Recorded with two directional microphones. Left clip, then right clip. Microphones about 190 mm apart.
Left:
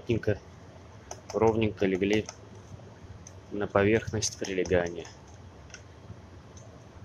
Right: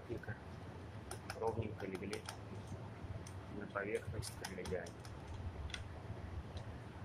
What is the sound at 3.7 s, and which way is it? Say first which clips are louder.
Speech: left 17 dB; 50° left (ahead or behind).